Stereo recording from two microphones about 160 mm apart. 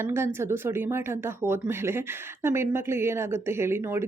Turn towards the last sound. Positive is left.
turn(degrees=-15)  # may be behind; listen again after turning